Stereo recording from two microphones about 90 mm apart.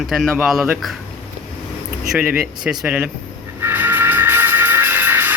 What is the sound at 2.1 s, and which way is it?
Speech, 15° right (ahead or behind).